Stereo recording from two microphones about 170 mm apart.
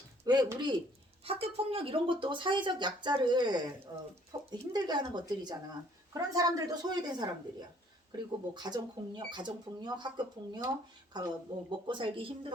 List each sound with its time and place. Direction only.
0.3 s speech: 20° right (ahead or behind)
1.2 s speech: 35° right (ahead or behind)
11.9 s speech: 30° right (ahead or behind)